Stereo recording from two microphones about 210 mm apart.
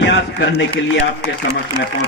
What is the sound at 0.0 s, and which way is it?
Speech, 60° left (ahead or behind).